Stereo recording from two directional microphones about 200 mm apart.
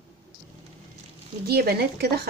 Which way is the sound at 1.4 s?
50° right (ahead or behind).